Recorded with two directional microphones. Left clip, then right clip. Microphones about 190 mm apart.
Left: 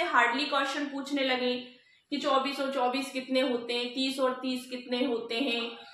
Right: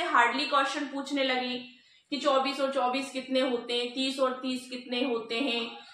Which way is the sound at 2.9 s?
15° left (ahead or behind).